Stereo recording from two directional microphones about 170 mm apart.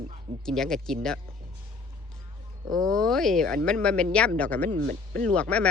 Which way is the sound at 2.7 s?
5° left (ahead or behind).